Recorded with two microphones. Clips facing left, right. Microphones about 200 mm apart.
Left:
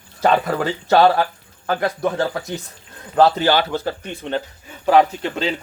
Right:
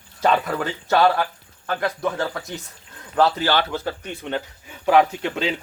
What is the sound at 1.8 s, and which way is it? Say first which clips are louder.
Speech: left 2 dB; 45° left (ahead or behind).